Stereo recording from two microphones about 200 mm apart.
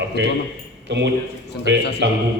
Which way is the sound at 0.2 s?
60° right (ahead or behind).